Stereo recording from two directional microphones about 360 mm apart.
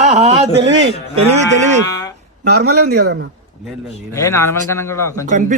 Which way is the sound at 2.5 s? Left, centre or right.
Right.